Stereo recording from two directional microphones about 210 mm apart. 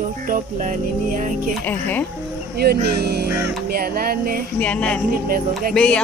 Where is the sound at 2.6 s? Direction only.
50° right (ahead or behind).